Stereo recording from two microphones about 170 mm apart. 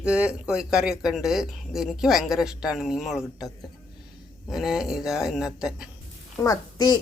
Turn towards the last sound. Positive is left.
turn(degrees=20)  # may be behind; listen again after turning